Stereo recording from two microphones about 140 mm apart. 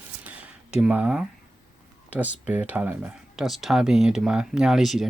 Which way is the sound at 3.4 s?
Centre (ahead or behind).